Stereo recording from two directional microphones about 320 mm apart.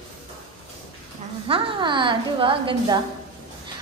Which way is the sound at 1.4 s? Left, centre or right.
Centre.